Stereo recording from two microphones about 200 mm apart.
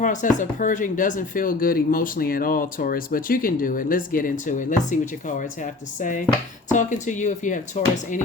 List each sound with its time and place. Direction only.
0.0 s speech: 40° left (ahead or behind)
6.0 s speech: 40° left (ahead or behind)